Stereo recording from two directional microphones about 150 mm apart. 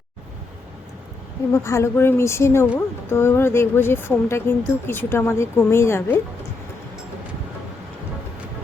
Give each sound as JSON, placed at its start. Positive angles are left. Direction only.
{"t": 1.5, "sound": "speech", "side_deg": 20}